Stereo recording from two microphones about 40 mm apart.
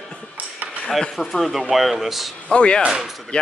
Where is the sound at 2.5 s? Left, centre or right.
Left.